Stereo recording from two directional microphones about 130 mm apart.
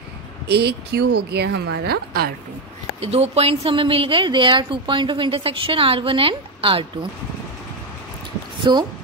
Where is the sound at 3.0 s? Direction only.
55° right (ahead or behind).